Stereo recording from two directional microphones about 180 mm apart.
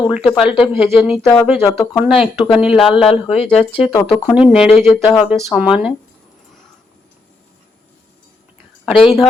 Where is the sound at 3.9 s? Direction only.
20° left (ahead or behind).